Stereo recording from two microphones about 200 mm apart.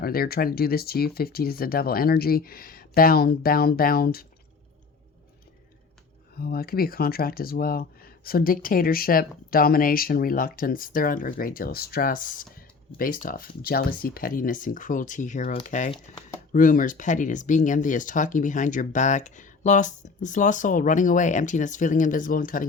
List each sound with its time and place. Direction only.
0.0 s speech: 50° left (ahead or behind)
6.3 s speech: 50° left (ahead or behind)